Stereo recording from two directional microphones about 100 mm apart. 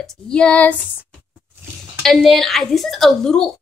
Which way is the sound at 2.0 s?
Centre (ahead or behind).